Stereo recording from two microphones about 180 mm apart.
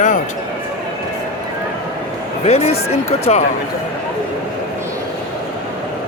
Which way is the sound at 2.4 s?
35° left (ahead or behind).